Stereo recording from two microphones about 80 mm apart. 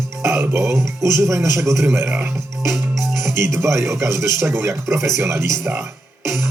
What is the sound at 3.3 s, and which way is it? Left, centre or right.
Speech, right.